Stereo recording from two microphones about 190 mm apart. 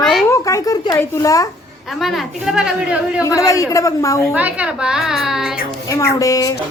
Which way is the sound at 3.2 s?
15° left (ahead or behind).